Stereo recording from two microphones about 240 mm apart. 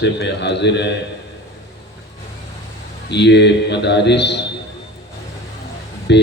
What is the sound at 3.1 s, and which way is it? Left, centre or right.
A man's voice, left.